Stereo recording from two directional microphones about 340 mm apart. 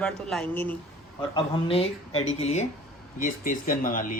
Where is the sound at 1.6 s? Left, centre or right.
Centre.